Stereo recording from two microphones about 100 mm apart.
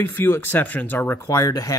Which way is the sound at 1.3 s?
35° left (ahead or behind).